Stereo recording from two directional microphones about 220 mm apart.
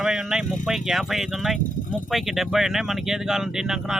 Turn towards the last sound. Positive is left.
turn(degrees=0)  # may be behind; listen again after turning